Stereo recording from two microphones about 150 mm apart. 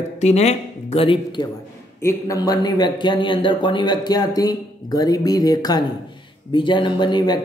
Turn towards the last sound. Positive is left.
turn(degrees=30)  # may be behind; listen again after turning